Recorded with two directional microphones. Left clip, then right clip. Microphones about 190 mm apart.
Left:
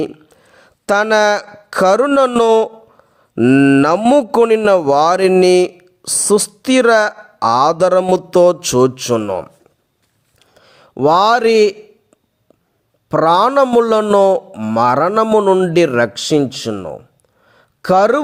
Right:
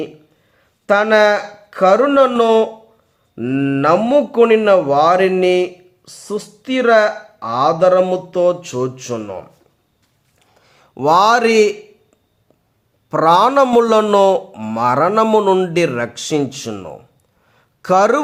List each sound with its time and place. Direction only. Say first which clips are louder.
0.5 s speech: even; 60° left (ahead or behind)
10.6 s speech: left 5 dB; 35° left (ahead or behind)
13.1 s speech: even; 35° left (ahead or behind)
14.8 s speech: left 1 dB; 35° left (ahead or behind)
15.7 s speech: left 5 dB; 35° left (ahead or behind)
17.5 s a sound: left 1 dB; 30° left (ahead or behind)